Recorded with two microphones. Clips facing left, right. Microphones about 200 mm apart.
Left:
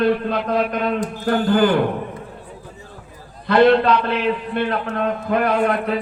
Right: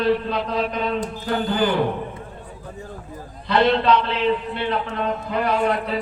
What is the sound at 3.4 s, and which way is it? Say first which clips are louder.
A man's voice: left 5 dB; 55° left (ahead or behind).